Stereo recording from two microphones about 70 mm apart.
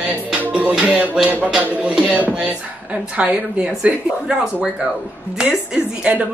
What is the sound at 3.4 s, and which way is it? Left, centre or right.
Speech, centre.